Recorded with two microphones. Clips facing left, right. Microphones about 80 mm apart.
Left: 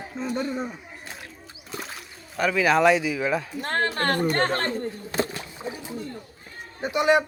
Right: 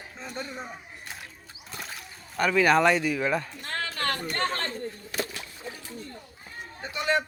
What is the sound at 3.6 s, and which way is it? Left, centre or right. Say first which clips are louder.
Speech: left 7 dB; left.